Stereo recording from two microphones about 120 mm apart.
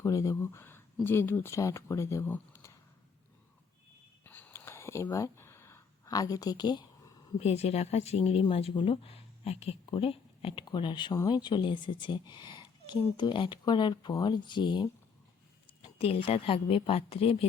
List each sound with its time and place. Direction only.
0.0 s speech: 30° left (ahead or behind)
4.2 s a sound: 15° left (ahead or behind); by 7.1 s 35° left (ahead or behind)
7.3 s speech: 60° left (ahead or behind); by 14.8 s 40° left (ahead or behind)
16.0 s a woman's voice: 55° left (ahead or behind)